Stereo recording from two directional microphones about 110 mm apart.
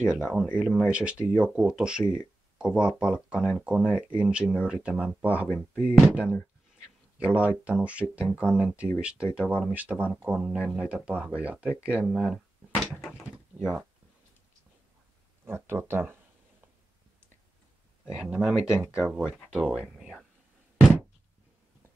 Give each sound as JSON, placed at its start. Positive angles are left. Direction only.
{"t": 0.0, "sound": "speech", "side_deg": -10}
{"t": 7.2, "sound": "speech", "side_deg": -10}
{"t": 15.4, "sound": "speech", "side_deg": -20}
{"t": 18.0, "sound": "speech", "side_deg": -10}